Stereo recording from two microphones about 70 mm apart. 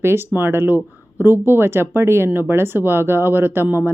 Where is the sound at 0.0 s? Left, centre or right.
Right.